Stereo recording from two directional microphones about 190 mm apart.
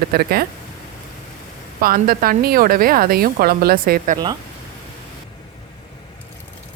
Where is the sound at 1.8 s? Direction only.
50° right (ahead or behind).